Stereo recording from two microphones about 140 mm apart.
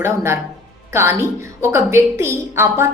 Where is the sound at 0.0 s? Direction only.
20° right (ahead or behind).